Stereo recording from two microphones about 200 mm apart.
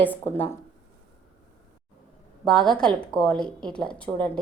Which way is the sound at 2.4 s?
5° left (ahead or behind).